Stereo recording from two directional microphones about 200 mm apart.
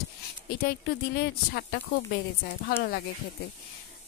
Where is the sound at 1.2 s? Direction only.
50° left (ahead or behind).